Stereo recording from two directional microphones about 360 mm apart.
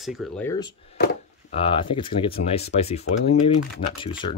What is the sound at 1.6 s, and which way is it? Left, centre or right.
Speech, centre.